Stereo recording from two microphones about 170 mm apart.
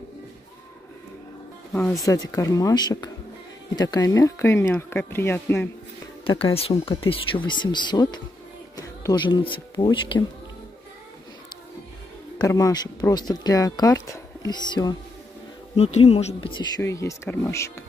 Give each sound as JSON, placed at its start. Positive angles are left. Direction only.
{"t": 1.7, "sound": "speech", "side_deg": 5}
{"t": 2.0, "sound": "speech", "side_deg": 20}
{"t": 6.2, "sound": "speech", "side_deg": 30}
{"t": 12.4, "sound": "speech", "side_deg": 20}
{"t": 15.7, "sound": "speech", "side_deg": 40}
{"t": 16.8, "sound": "speech", "side_deg": 15}